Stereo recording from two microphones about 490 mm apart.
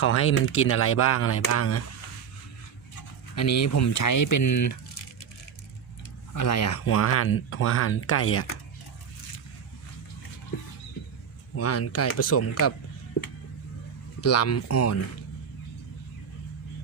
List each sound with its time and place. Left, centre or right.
0.0 s speech: left
3.3 s speech: left
6.3 s speech: left
11.5 s speech: left
14.2 s speech: left